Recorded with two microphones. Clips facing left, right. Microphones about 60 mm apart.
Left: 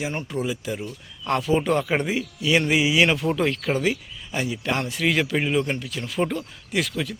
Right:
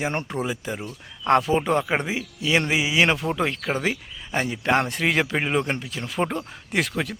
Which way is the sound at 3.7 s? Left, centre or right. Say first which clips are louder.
Left 2 dB; right.